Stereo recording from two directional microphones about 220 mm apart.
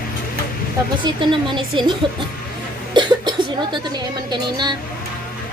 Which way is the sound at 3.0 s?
20° right (ahead or behind).